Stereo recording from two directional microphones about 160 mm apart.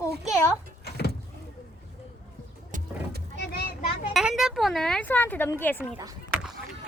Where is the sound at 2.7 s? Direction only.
55° right (ahead or behind).